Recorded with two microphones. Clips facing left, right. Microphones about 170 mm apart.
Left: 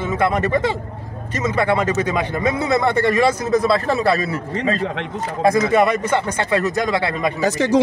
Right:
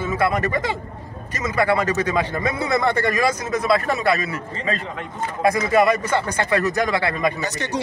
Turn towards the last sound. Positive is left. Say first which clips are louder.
# left 10 dB
turn(degrees=90)